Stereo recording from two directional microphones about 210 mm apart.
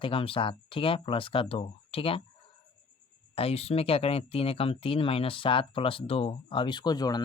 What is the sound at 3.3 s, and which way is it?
Speech, 30° left (ahead or behind).